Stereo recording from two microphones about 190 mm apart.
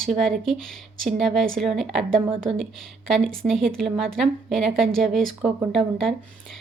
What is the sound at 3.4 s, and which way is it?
A woman's voice, centre (ahead or behind).